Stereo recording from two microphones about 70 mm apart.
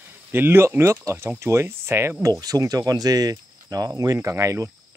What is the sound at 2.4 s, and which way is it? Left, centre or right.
Speech, right.